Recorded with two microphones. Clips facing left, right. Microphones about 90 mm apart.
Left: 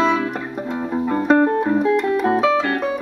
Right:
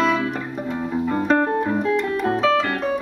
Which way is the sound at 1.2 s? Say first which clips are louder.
Left 5 dB; 5° left (ahead or behind).